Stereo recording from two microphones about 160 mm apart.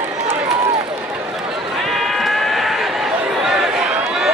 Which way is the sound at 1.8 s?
Centre (ahead or behind).